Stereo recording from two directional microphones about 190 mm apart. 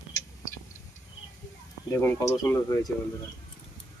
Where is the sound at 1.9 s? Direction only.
15° left (ahead or behind).